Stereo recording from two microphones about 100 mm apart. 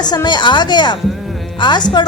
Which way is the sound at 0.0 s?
45° left (ahead or behind).